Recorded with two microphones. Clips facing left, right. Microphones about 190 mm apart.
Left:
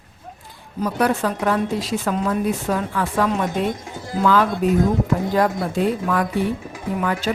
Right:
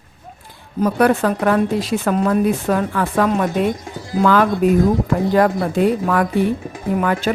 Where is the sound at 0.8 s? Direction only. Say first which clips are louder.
Right 5 dB; 60° right (ahead or behind).